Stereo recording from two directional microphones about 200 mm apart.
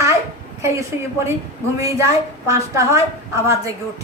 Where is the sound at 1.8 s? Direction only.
15° right (ahead or behind).